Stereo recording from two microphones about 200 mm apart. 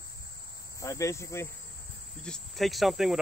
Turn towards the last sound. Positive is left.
turn(degrees=0)  # may be behind; listen again after turning